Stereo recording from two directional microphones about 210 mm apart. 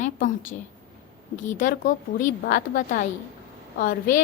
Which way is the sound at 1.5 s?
40° left (ahead or behind).